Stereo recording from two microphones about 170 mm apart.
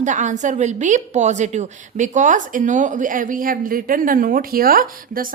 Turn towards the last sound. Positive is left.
turn(degrees=-60)  # may be behind; listen again after turning